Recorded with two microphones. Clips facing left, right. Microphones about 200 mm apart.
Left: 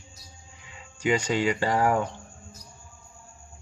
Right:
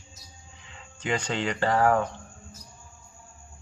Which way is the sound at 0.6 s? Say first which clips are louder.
Left 5 dB; 10° left (ahead or behind).